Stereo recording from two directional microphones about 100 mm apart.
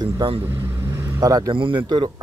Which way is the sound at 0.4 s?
25° right (ahead or behind).